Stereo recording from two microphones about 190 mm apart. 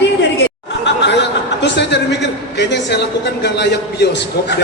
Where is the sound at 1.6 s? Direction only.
65° left (ahead or behind).